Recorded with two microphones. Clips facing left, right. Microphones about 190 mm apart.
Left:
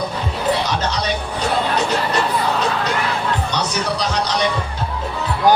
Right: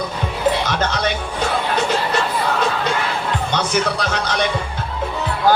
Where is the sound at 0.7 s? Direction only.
55° right (ahead or behind).